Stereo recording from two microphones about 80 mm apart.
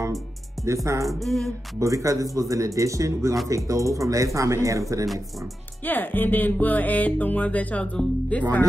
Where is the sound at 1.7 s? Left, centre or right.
Right.